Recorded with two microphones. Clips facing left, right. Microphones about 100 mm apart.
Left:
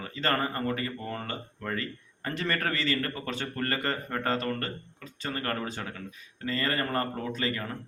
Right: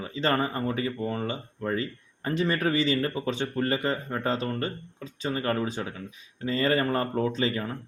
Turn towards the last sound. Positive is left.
turn(degrees=-25)  # may be behind; listen again after turning